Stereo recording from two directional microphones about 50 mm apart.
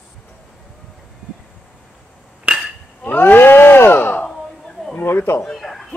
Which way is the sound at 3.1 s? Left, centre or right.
Left.